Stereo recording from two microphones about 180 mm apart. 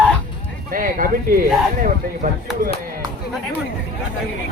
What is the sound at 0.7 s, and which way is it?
Speech, 50° right (ahead or behind).